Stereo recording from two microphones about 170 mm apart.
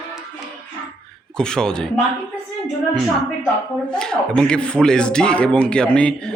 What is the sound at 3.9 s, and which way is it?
Speech, 5° left (ahead or behind).